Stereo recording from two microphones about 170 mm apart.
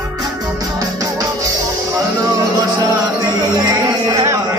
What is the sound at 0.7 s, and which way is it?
Music, 20° right (ahead or behind).